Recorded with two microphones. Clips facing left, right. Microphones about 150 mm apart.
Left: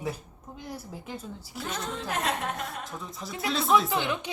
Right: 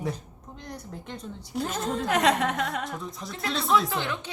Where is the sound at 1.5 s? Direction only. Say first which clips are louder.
Right 6 dB; 40° right (ahead or behind).